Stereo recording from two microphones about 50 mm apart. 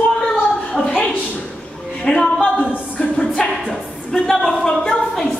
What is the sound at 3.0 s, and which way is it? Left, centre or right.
Music, centre.